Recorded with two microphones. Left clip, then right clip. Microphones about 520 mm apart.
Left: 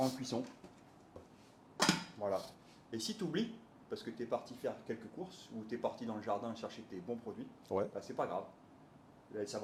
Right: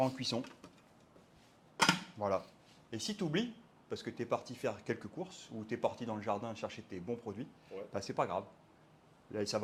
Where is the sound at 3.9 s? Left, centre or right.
Right.